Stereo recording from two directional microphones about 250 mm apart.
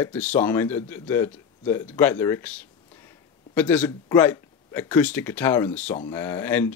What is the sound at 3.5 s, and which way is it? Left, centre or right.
Speech, centre.